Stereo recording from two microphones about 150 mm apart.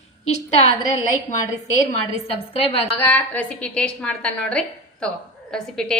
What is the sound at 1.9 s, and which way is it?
Speech, 40° left (ahead or behind).